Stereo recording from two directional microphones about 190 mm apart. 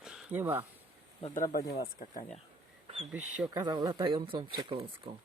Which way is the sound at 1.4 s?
50° left (ahead or behind).